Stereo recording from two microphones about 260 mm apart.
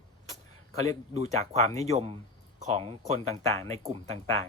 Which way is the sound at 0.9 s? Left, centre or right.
Right.